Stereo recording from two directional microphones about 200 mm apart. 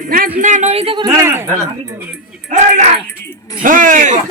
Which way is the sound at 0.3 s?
40° right (ahead or behind).